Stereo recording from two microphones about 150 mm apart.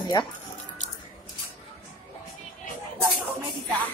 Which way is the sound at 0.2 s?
30° left (ahead or behind).